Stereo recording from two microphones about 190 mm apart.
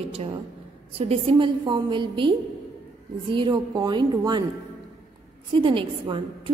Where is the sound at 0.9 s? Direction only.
30° right (ahead or behind).